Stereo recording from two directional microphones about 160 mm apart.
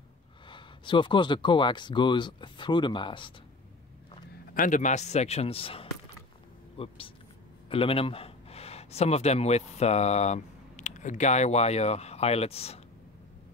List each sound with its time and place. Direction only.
0.5 s speech: 30° left (ahead or behind)
4.3 s a man's voice: 55° left (ahead or behind); by 12.8 s 40° left (ahead or behind)